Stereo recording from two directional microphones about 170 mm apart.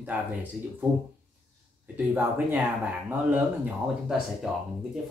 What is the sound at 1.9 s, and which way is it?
Speech, 10° right (ahead or behind).